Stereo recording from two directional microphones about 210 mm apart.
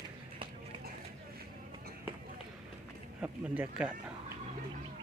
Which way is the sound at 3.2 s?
5° right (ahead or behind).